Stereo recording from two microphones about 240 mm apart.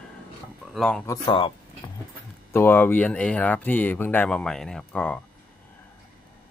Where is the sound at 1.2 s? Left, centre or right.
Centre.